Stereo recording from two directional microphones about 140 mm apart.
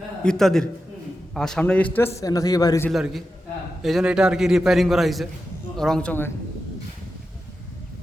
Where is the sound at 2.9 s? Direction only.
Centre (ahead or behind).